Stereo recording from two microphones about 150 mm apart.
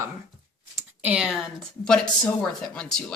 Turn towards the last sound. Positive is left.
turn(degrees=5)  # may be behind; listen again after turning